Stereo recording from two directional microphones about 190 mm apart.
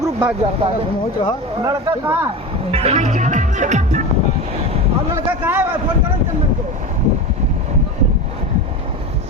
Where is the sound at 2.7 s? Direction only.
35° right (ahead or behind).